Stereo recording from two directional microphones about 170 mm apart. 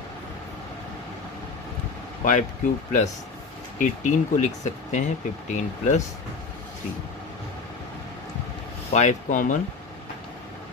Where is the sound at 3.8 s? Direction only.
45° left (ahead or behind).